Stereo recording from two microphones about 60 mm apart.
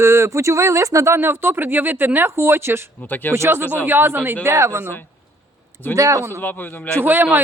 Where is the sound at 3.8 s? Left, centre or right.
Right.